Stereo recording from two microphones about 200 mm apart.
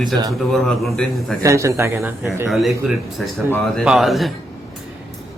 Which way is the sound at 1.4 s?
15° right (ahead or behind).